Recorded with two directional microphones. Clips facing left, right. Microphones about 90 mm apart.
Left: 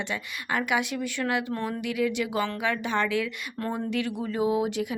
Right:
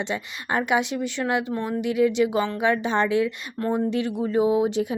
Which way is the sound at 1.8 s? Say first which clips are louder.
Right 9 dB; 25° right (ahead or behind).